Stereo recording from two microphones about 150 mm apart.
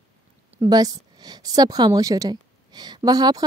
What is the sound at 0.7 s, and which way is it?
A woman's voice, 25° right (ahead or behind).